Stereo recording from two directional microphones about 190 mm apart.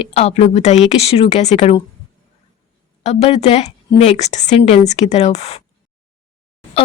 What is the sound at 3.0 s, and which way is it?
A woman's voice, 35° left (ahead or behind).